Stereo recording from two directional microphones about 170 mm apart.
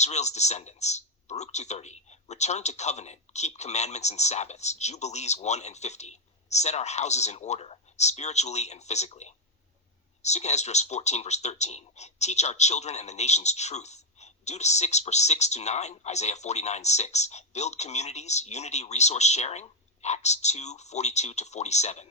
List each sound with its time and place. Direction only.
0.0 s speech: 40° left (ahead or behind)